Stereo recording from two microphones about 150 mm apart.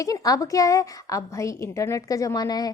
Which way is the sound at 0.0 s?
20° left (ahead or behind).